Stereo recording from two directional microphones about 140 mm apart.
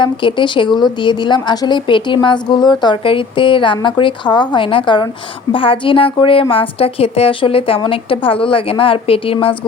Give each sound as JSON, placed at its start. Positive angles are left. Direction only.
{"t": 0.0, "sound": "a woman's voice", "side_deg": 35}